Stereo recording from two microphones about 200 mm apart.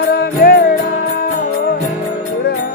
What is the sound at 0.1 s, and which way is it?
Music, 50° left (ahead or behind).